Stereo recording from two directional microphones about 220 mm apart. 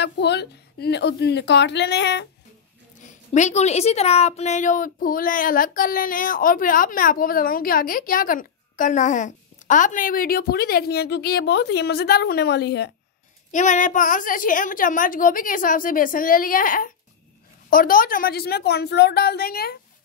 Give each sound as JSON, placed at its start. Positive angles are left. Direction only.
{"t": 0.0, "sound": "a woman's voice", "side_deg": 50}
{"t": 3.1, "sound": "speech", "side_deg": 30}
{"t": 13.5, "sound": "a woman's voice", "side_deg": 35}